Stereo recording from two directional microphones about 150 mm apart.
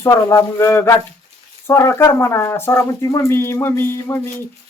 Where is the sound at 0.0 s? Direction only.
20° left (ahead or behind).